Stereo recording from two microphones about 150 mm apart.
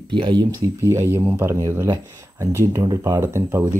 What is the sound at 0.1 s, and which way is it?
Speech, 30° right (ahead or behind).